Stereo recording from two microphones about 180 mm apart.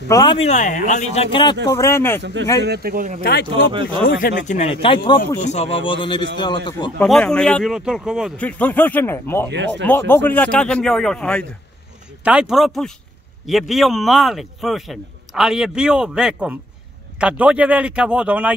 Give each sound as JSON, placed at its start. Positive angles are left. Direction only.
{"t": 0.1, "sound": "a man's voice", "side_deg": 25}
{"t": 0.5, "sound": "speech", "side_deg": 45}
{"t": 1.8, "sound": "speech", "side_deg": 15}
{"t": 2.6, "sound": "speech", "side_deg": -60}
{"t": 3.2, "sound": "speech", "side_deg": 60}
{"t": 4.5, "sound": "a man's voice", "side_deg": 35}
{"t": 7.0, "sound": "speech", "side_deg": 5}
{"t": 8.4, "sound": "speech", "side_deg": 10}
{"t": 12.2, "sound": "speech", "side_deg": -5}